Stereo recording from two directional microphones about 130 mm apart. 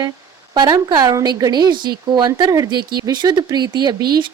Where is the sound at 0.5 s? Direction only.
35° right (ahead or behind).